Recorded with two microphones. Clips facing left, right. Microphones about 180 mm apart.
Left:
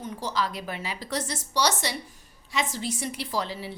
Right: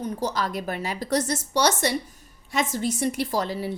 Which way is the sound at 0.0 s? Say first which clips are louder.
Right 3 dB; 45° right (ahead or behind).